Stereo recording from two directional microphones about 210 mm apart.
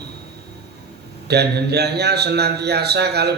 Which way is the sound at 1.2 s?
50° right (ahead or behind).